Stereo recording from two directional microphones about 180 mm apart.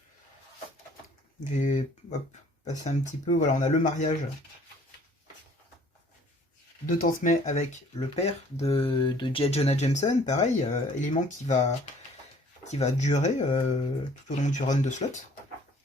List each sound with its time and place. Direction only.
1.5 s speech: 40° left (ahead or behind)
6.8 s speech: 45° left (ahead or behind)